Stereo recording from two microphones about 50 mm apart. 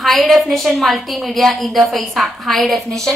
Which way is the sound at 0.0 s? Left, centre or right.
Centre.